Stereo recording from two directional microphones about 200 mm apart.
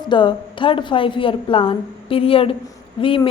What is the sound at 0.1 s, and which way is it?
A woman's voice, 25° left (ahead or behind).